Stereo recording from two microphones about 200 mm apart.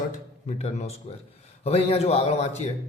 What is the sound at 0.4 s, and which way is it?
A man's voice, 35° left (ahead or behind).